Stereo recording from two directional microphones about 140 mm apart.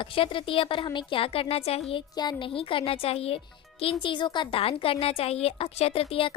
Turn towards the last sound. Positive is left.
turn(degrees=40)  # may be behind; listen again after turning